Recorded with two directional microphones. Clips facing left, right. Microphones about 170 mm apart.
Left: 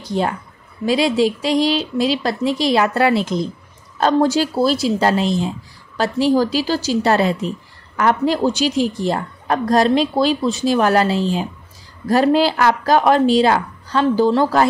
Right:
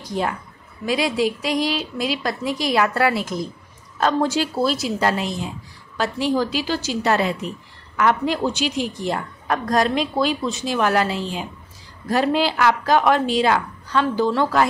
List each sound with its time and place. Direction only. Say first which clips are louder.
0.0 s speech: left 4 dB; 30° left (ahead or behind)
4.0 s a woman's voice: left 4 dB; 35° left (ahead or behind)